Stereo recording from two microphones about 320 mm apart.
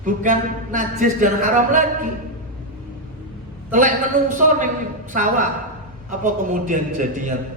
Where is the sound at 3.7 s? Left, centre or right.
Right.